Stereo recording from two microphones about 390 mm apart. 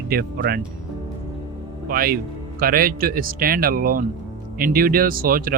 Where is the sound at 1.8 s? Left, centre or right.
Right.